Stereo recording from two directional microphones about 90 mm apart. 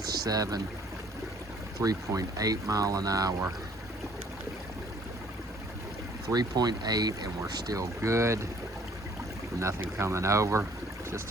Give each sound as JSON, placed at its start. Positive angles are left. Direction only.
{"t": 0.3, "sound": "speech", "side_deg": -45}
{"t": 1.8, "sound": "speech", "side_deg": -40}
{"t": 6.2, "sound": "speech", "side_deg": -45}
{"t": 9.6, "sound": "speech", "side_deg": -30}